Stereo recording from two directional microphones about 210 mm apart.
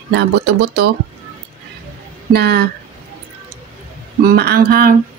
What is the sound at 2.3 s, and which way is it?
Speech, 50° right (ahead or behind).